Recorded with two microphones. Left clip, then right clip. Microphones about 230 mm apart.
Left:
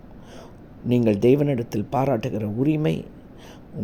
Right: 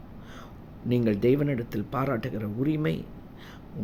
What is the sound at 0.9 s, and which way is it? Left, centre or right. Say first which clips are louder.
A man's voice: left 6 dB; centre.